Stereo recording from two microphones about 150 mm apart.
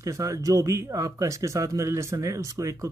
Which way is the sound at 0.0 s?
20° right (ahead or behind).